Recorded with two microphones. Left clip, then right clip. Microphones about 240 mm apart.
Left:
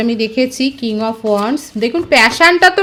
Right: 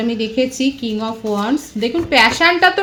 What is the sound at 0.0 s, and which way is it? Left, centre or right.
A woman's voice, left.